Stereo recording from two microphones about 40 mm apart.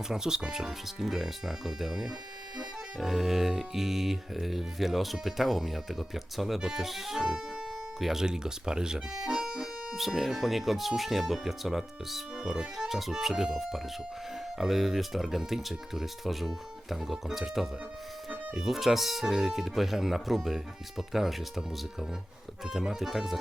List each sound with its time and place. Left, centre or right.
0.1 s speech: centre
7.2 s music: centre
7.9 s speech: centre
8.2 s speech: centre
22.9 s speech: centre